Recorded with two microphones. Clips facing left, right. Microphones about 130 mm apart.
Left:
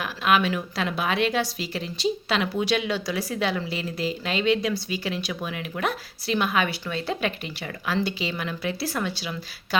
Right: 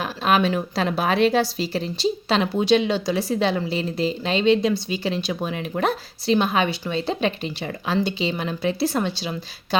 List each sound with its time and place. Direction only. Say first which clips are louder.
0.0 s a woman's voice: right 2 dB; 35° right (ahead or behind)